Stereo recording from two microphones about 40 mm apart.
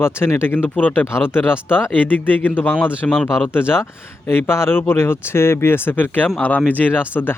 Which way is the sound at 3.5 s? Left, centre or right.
Left.